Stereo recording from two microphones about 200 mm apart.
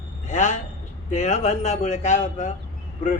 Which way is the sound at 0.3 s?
40° left (ahead or behind).